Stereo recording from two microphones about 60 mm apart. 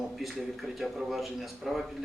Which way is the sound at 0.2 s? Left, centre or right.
Centre.